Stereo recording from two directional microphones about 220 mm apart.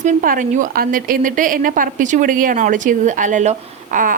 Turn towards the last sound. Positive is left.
turn(degrees=-35)  # may be behind; listen again after turning